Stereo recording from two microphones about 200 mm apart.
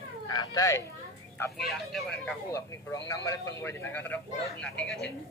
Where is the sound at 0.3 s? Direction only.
20° left (ahead or behind).